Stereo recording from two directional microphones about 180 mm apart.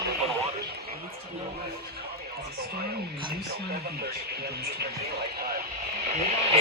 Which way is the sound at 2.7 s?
60° right (ahead or behind).